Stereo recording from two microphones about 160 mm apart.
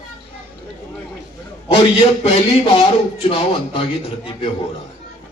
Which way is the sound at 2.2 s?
35° left (ahead or behind).